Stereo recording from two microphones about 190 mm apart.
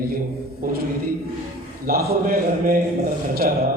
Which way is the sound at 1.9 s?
50° right (ahead or behind).